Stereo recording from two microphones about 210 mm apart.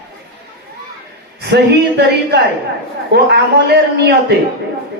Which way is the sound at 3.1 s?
50° right (ahead or behind).